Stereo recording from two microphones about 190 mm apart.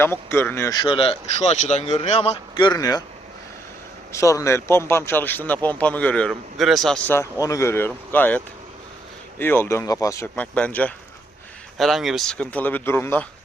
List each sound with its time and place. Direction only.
0.0 s speech: 10° left (ahead or behind)
4.1 s a man's voice: 15° left (ahead or behind)
7.1 s a man's voice: 15° left (ahead or behind)
9.4 s a man's voice: 10° left (ahead or behind)